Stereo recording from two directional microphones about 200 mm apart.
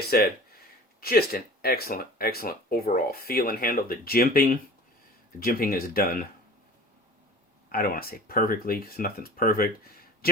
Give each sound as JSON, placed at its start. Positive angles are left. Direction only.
{"t": 0.1, "sound": "speech", "side_deg": 50}
{"t": 7.7, "sound": "speech", "side_deg": 45}